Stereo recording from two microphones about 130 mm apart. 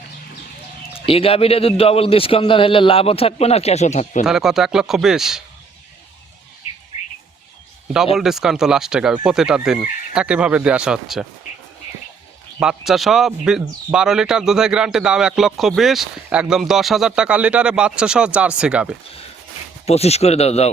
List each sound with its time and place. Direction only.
0.9 s a man's voice: 45° left (ahead or behind); by 4.2 s 60° left (ahead or behind)
4.2 s speech: 5° right (ahead or behind)
8.1 s speech: 5° right (ahead or behind)
12.5 s speech: 5° right (ahead or behind)
19.8 s a man's voice: 55° left (ahead or behind)